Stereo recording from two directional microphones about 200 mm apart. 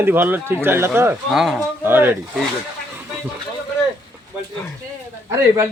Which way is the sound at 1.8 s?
10° right (ahead or behind).